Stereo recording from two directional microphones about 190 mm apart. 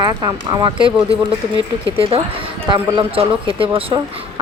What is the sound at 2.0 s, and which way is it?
Speech, 30° right (ahead or behind).